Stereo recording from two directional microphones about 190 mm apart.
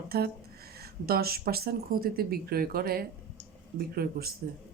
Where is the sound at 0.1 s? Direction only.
55° right (ahead or behind).